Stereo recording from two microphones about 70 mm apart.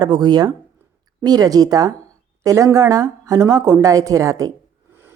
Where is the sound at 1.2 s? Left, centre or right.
Right.